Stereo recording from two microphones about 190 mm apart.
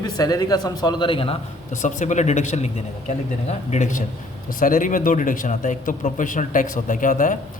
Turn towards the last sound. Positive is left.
turn(degrees=40)  # may be behind; listen again after turning